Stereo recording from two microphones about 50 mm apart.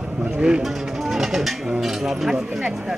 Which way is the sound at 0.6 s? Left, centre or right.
Centre.